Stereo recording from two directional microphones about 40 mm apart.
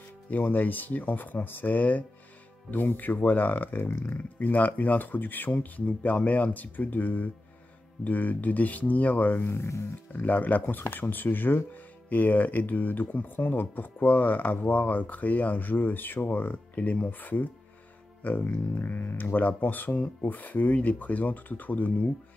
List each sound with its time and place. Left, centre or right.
0.3 s speech: left
9.4 s speech: left
10.1 s speech: left
10.6 s speech: left
12.1 s speech: left